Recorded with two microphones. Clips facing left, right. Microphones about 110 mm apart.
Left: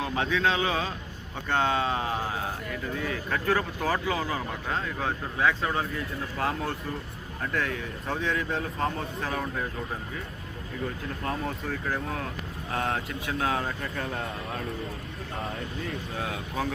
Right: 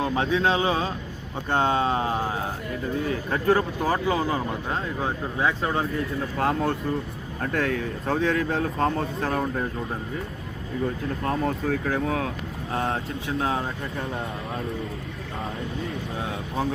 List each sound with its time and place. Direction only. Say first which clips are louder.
0.0 s speech: right 4 dB; 30° right (ahead or behind)
6.3 s speech: right 6 dB; 35° right (ahead or behind)
11.2 s speech: right 5 dB; 30° right (ahead or behind)
11.7 s speech: right 6 dB; 60° right (ahead or behind)
12.7 s speech: right 2 dB; 30° right (ahead or behind)
16.2 s speech: right 3 dB; 25° right (ahead or behind)